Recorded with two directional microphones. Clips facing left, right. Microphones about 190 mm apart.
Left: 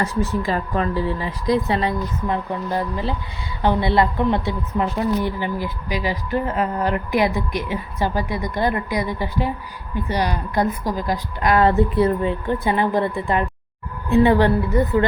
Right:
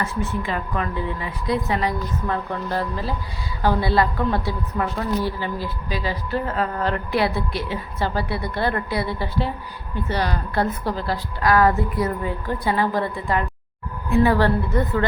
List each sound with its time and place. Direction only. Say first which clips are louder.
0.0 s a woman's voice: left 4 dB; 35° left (ahead or behind)
2.2 s a woman's voice: left 2 dB; 15° left (ahead or behind)